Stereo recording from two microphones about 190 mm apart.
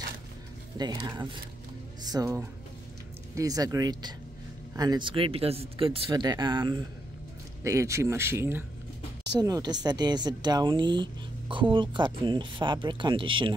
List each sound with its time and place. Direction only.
0.7 s speech: 20° right (ahead or behind)